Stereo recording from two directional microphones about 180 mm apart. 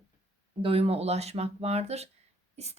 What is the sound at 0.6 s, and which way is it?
A woman's voice, 30° right (ahead or behind).